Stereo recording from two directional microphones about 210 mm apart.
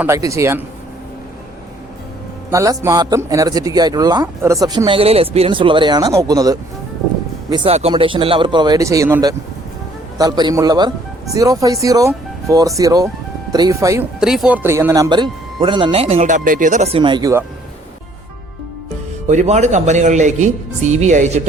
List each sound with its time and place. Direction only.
0.0 s speech: 15° right (ahead or behind)
2.5 s speech: 15° right (ahead or behind)
7.5 s speech: 25° right (ahead or behind)
14.2 s speech: centre (ahead or behind); by 17.4 s 20° right (ahead or behind)
19.3 s speech: 35° right (ahead or behind)